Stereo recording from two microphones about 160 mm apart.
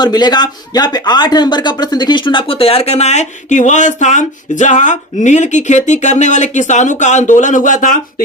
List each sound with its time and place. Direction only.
0.0 s speech: 25° left (ahead or behind); by 7.9 s 55° left (ahead or behind)